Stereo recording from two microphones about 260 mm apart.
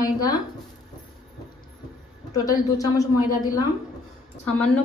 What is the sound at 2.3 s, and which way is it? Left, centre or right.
A woman's voice, centre.